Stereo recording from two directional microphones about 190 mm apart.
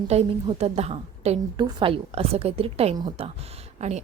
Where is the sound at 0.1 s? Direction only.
30° right (ahead or behind).